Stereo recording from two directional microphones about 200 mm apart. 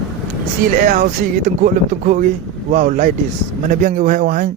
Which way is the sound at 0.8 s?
45° right (ahead or behind).